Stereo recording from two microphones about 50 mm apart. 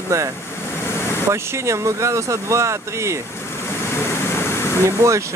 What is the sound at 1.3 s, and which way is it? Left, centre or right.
Speech, right.